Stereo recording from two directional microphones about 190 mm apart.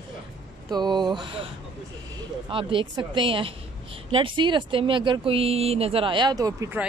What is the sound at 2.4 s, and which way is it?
Speech, 25° right (ahead or behind).